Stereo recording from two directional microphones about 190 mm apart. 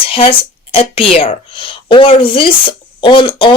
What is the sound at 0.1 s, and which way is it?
A woman's voice, 30° left (ahead or behind).